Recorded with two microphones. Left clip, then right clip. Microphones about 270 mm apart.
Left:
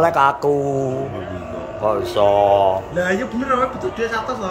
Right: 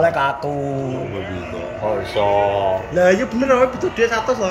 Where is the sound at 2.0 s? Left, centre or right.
Centre.